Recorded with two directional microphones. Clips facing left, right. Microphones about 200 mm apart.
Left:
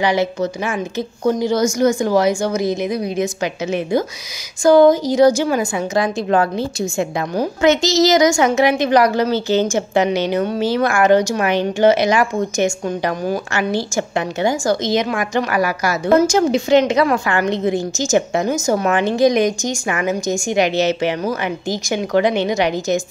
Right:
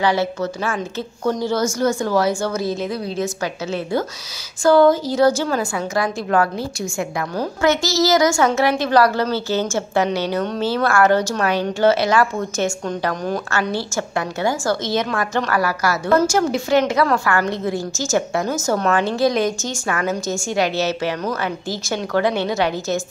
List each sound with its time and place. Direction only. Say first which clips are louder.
0.0 s speech: left 2 dB; 15° left (ahead or behind)